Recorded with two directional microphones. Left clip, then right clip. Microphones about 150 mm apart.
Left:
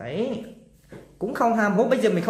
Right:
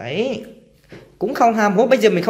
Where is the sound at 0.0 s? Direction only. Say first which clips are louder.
Right 6 dB; 15° right (ahead or behind).